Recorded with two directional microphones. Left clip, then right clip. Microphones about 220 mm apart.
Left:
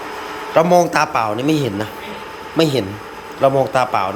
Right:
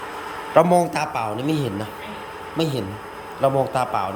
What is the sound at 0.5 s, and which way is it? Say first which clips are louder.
A man's voice: left 4 dB; 10° right (ahead or behind).